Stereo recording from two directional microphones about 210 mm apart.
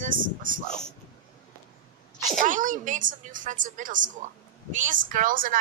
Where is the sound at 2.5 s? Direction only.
40° right (ahead or behind).